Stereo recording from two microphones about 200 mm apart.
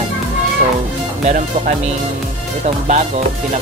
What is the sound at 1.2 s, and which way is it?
Speech, 40° right (ahead or behind).